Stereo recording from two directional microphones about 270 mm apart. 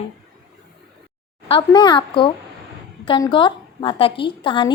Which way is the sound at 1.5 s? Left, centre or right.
Centre.